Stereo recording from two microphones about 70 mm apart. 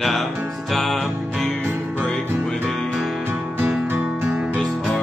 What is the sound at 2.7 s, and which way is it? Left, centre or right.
Music, centre.